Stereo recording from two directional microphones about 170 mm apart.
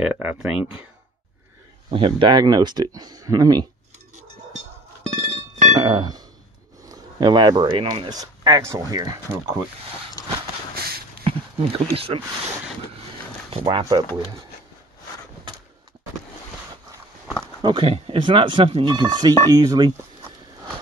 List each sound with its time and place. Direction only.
0.0 s speech: 10° right (ahead or behind)
1.9 s speech: 30° right (ahead or behind)
5.1 s music: 45° right (ahead or behind)
5.8 s speech: 25° right (ahead or behind)
10.2 s a sound: 25° left (ahead or behind)
11.2 s speech: 35° right (ahead or behind)
13.5 s speech: 30° right (ahead or behind)
17.6 s speech: 30° right (ahead or behind)